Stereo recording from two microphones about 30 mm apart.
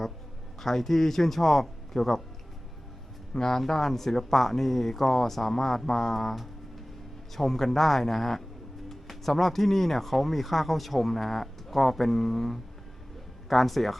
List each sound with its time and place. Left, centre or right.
0.6 s speech: centre
3.3 s a man's voice: centre